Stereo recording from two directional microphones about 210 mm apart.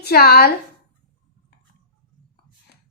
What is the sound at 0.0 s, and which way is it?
Speech, 50° left (ahead or behind).